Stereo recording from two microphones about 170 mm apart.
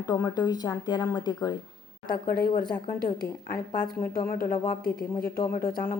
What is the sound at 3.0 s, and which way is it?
Speech, 20° left (ahead or behind).